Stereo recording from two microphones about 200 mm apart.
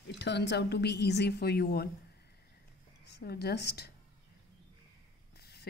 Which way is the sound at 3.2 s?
55° left (ahead or behind).